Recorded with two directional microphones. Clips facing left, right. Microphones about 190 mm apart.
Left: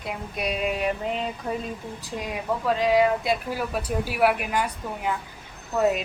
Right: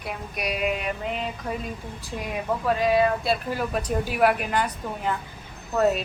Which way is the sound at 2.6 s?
15° left (ahead or behind).